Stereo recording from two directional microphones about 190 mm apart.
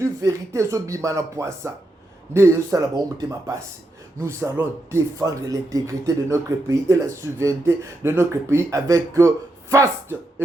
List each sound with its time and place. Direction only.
0.0 s speech: 15° right (ahead or behind)